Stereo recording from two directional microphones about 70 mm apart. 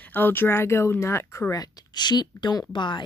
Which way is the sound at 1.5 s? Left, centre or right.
Left.